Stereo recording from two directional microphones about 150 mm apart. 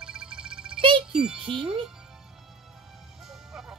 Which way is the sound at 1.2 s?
5° right (ahead or behind).